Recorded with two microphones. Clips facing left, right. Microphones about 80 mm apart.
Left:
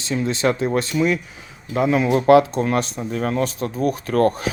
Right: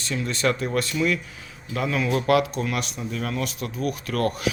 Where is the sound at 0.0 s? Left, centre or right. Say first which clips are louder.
Left 4 dB; left.